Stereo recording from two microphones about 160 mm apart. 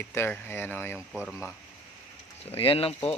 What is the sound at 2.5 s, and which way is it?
Speech, 35° left (ahead or behind).